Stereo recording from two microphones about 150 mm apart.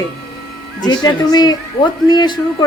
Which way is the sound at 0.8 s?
25° left (ahead or behind).